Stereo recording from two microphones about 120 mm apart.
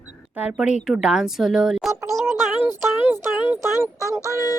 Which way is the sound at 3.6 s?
30° left (ahead or behind).